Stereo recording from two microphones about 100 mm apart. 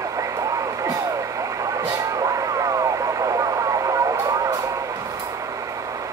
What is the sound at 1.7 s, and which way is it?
Vehicle, 35° right (ahead or behind).